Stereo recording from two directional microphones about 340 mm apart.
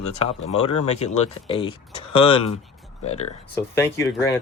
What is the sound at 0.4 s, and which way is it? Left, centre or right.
Speech, centre.